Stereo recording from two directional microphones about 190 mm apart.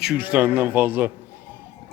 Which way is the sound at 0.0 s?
5° right (ahead or behind).